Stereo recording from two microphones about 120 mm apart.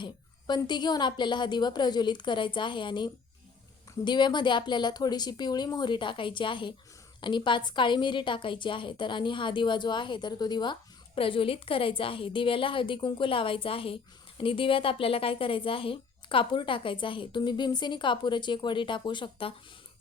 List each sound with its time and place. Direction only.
0.0 s a woman's voice: 40° left (ahead or behind)